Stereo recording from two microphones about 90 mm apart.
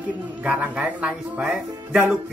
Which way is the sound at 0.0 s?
15° right (ahead or behind).